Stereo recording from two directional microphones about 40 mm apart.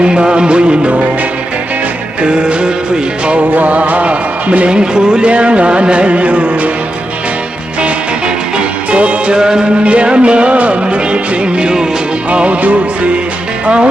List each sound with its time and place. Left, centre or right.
0.0 s music: right
2.2 s music: right
8.9 s music: right
9.4 s music: centre
9.8 s music: right